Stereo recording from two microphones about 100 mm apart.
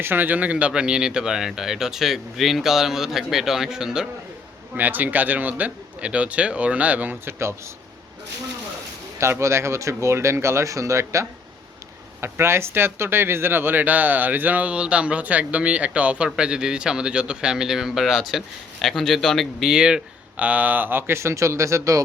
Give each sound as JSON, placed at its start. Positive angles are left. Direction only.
{"t": 0.0, "sound": "speech", "side_deg": -20}
{"t": 4.7, "sound": "speech", "side_deg": -15}
{"t": 9.1, "sound": "speech", "side_deg": -30}